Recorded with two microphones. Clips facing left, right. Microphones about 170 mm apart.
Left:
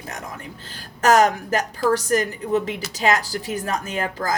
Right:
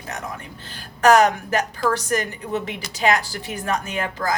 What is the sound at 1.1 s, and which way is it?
A woman's voice, 40° left (ahead or behind).